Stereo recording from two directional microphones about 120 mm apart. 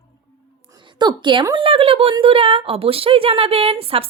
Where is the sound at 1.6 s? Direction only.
50° right (ahead or behind).